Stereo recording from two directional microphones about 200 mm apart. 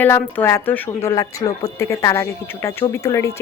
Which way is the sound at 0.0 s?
10° left (ahead or behind).